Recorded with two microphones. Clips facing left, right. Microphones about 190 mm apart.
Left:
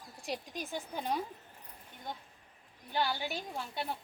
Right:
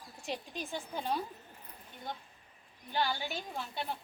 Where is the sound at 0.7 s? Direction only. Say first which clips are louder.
Even; 15° left (ahead or behind).